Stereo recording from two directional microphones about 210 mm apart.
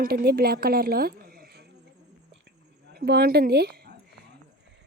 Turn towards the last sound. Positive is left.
turn(degrees=-50)  # may be behind; listen again after turning